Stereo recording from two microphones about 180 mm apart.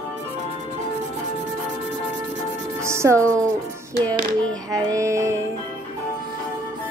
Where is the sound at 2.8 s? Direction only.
15° right (ahead or behind).